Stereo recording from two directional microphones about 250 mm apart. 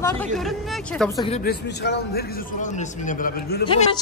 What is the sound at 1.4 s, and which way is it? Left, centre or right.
A man's voice, left.